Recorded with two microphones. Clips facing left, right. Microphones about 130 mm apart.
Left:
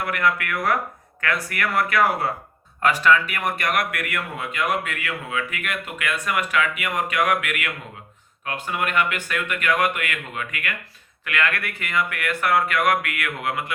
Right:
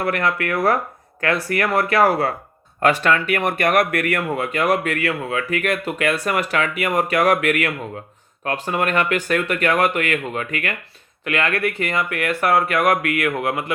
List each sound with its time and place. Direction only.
0.0 s speech: 35° right (ahead or behind)
3.0 s a man's voice: 60° right (ahead or behind)
4.6 s speech: 35° right (ahead or behind)